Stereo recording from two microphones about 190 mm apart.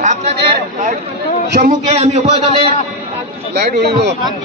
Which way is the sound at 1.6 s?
35° right (ahead or behind).